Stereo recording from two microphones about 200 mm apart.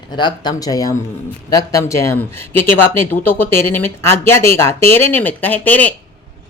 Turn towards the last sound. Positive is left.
turn(degrees=10)  # may be behind; listen again after turning